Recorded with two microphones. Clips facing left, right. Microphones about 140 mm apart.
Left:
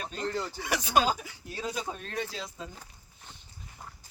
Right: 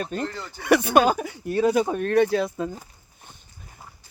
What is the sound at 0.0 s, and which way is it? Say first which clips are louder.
Speech: right 8 dB; 50° right (ahead or behind).